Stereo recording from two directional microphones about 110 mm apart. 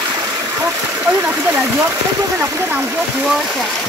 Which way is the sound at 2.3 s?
30° right (ahead or behind).